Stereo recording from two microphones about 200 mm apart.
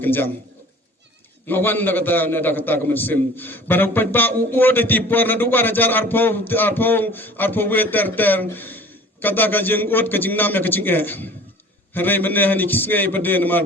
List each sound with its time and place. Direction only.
0.0 s a man's voice: 10° left (ahead or behind)
1.5 s a man's voice: 10° left (ahead or behind)